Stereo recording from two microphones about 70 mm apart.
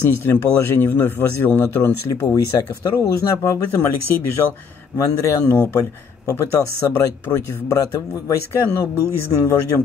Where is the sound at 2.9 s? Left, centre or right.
Left.